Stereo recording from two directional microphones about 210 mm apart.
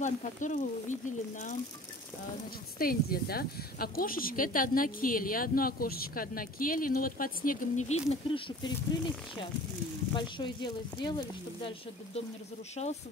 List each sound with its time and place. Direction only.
0.0 s speech: 35° left (ahead or behind)
2.8 s speech: 45° left (ahead or behind); by 8.5 s 30° left (ahead or behind)
10.1 s speech: 20° left (ahead or behind)
12.8 s speech: 30° left (ahead or behind)